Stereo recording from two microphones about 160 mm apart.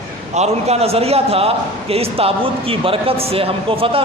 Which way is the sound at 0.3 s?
40° right (ahead or behind).